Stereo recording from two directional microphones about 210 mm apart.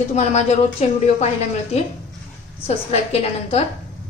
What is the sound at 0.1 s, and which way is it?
Speech, 30° left (ahead or behind).